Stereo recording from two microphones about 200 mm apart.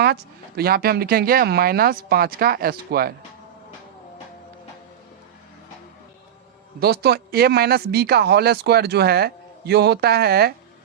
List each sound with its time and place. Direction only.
0.0 s speech: 50° right (ahead or behind)
6.7 s speech: 50° right (ahead or behind)